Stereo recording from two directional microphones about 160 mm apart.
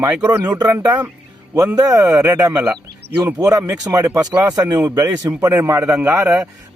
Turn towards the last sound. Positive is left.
turn(degrees=-15)  # may be behind; listen again after turning